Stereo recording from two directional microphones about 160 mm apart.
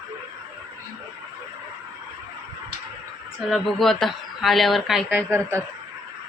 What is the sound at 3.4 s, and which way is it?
Speech, centre (ahead or behind).